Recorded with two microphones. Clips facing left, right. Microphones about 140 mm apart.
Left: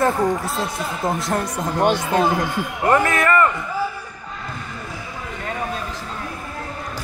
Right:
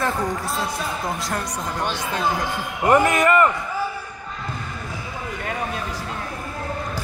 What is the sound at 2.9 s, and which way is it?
Speech, 15° right (ahead or behind).